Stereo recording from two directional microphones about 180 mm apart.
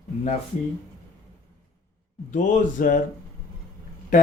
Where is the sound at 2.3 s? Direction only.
45° left (ahead or behind).